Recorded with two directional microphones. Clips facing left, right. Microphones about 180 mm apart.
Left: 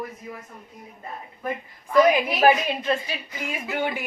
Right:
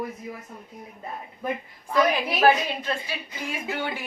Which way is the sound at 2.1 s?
15° left (ahead or behind).